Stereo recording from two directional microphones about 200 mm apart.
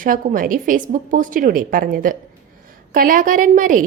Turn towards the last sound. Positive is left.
turn(degrees=-40)  # may be behind; listen again after turning